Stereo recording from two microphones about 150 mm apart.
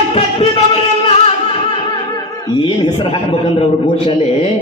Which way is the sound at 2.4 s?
25° left (ahead or behind).